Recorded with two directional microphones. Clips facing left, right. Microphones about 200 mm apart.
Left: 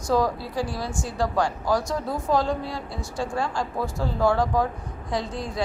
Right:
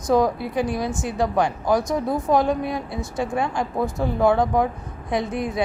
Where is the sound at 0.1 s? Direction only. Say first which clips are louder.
Right 4 dB; 20° right (ahead or behind).